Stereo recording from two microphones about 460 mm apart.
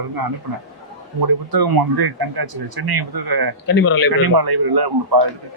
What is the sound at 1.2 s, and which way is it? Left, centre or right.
A man's voice, right.